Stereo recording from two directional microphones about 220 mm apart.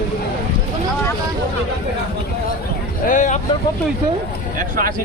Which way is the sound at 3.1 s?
35° left (ahead or behind).